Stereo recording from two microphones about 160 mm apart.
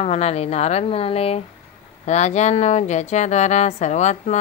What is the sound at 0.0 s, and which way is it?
Speech, 40° left (ahead or behind).